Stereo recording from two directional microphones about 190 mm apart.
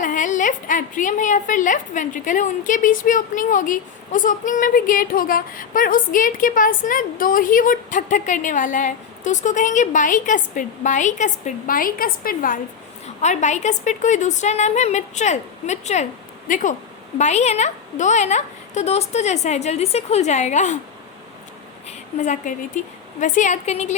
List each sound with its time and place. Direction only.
0.0 s a woman's voice: 45° left (ahead or behind)
13.2 s a woman's voice: 40° left (ahead or behind)
21.8 s a woman's voice: 40° left (ahead or behind)